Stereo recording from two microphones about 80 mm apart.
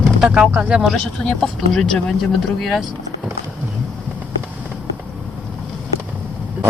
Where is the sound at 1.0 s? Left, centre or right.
Centre.